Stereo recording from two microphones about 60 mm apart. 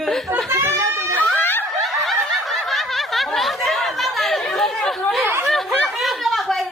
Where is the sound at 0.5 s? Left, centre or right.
Right.